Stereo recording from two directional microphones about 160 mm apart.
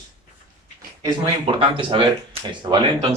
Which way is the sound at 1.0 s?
30° right (ahead or behind).